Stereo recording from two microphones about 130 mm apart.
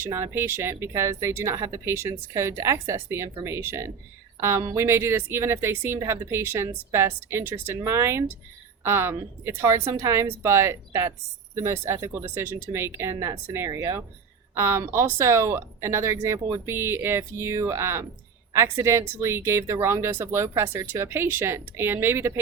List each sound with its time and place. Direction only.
0.0 s a woman's voice: 20° right (ahead or behind)